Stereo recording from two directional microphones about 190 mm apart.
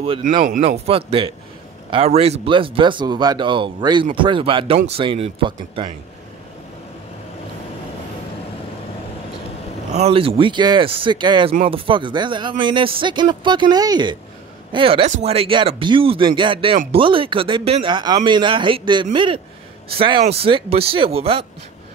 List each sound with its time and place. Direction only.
0.4 s speech: 45° right (ahead or behind)
0.7 s speech: 30° right (ahead or behind)
9.9 s speech: 30° right (ahead or behind)